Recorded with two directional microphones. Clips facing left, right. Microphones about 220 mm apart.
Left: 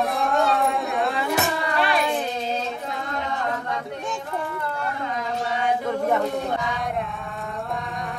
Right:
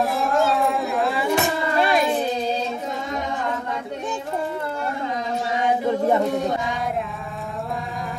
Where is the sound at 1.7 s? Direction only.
40° right (ahead or behind).